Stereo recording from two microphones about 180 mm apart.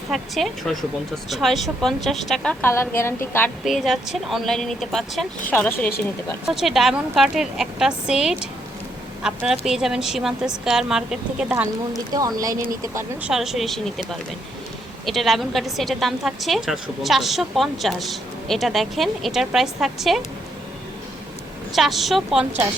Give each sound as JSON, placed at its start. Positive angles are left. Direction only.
{"t": 0.1, "sound": "a woman's voice", "side_deg": 0}
{"t": 3.6, "sound": "a woman's voice", "side_deg": 0}
{"t": 6.5, "sound": "a woman's voice", "side_deg": 0}
{"t": 12.1, "sound": "speech", "side_deg": -20}
{"t": 13.3, "sound": "a woman's voice", "side_deg": 0}
{"t": 15.0, "sound": "a woman's voice", "side_deg": 0}
{"t": 21.8, "sound": "a woman's voice", "side_deg": 0}